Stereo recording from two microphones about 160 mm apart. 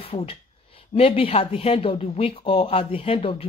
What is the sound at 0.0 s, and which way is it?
Speech, 35° left (ahead or behind).